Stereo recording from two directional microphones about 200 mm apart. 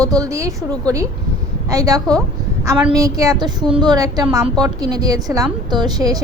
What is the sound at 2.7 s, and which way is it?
Speech, 5° right (ahead or behind).